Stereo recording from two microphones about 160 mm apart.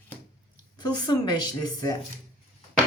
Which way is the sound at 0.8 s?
25° left (ahead or behind).